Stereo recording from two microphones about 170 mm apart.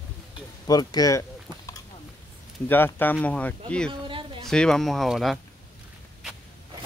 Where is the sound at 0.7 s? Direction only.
20° left (ahead or behind).